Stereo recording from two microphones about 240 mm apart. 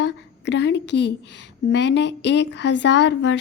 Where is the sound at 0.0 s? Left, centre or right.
Left.